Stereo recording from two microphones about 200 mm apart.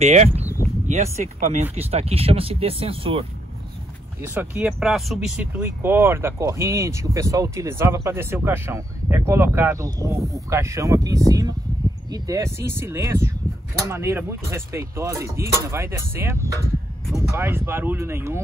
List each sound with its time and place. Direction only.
0.0 s speech: 35° right (ahead or behind)
4.3 s speech: 5° right (ahead or behind)